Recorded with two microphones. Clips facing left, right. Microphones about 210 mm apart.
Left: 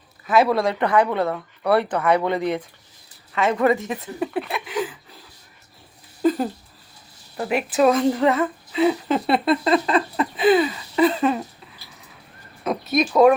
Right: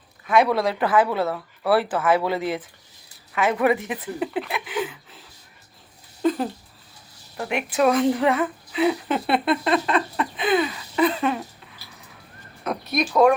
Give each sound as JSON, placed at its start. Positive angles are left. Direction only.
{"t": 0.3, "sound": "a woman's voice", "side_deg": 0}
{"t": 4.4, "sound": "a woman's voice", "side_deg": 0}
{"t": 6.2, "sound": "a sound", "side_deg": 0}
{"t": 7.3, "sound": "a woman's voice", "side_deg": 5}
{"t": 12.9, "sound": "a woman's voice", "side_deg": 0}